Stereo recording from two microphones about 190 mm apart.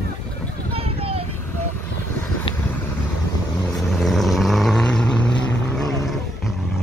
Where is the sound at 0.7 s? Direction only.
30° right (ahead or behind).